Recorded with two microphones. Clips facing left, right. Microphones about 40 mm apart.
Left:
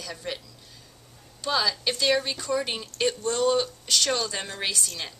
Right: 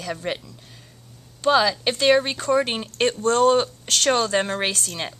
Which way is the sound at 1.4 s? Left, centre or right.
Right.